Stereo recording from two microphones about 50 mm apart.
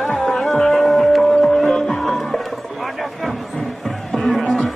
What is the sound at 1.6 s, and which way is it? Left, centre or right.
Music, centre.